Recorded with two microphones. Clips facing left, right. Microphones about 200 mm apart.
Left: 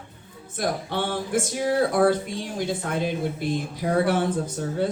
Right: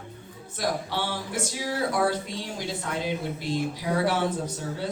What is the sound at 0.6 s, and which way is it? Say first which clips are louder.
Speech: left 2 dB; 55° left (ahead or behind).